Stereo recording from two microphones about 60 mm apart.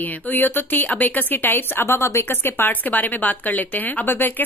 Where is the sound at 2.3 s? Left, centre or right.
Left.